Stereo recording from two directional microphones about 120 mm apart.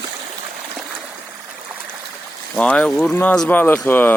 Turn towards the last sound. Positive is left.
turn(degrees=15)  # may be behind; listen again after turning